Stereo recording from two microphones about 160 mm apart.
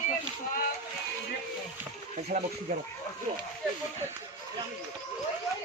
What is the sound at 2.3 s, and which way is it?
Speech, 60° right (ahead or behind).